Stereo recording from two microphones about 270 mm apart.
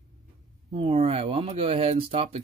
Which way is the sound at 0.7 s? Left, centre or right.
Right.